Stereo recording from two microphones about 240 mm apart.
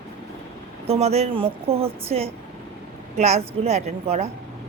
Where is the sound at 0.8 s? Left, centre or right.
Right.